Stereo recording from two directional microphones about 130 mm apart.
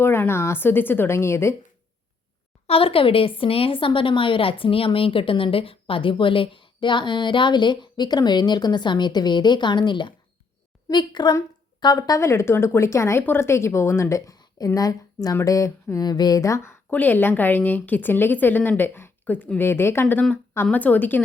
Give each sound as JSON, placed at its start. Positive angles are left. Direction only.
{"t": 0.0, "sound": "a woman's voice", "side_deg": 15}
{"t": 2.6, "sound": "a woman's voice", "side_deg": 45}
{"t": 16.9, "sound": "a woman's voice", "side_deg": 15}